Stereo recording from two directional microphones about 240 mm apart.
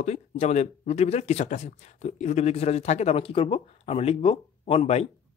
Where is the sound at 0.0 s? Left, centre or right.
Left.